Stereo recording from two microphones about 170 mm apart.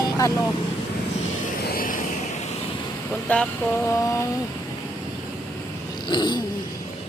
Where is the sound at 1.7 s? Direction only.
55° left (ahead or behind).